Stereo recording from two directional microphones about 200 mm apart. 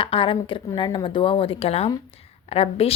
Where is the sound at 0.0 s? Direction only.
25° left (ahead or behind).